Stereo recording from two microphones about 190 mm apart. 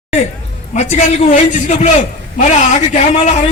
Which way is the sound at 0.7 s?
40° left (ahead or behind).